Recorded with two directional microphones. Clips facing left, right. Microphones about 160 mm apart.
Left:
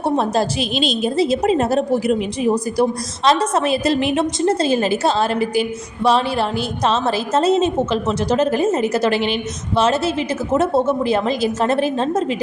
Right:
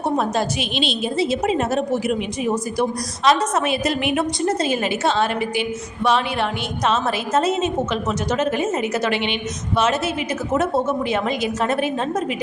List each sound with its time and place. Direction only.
0.0 s a woman's voice: 35° left (ahead or behind)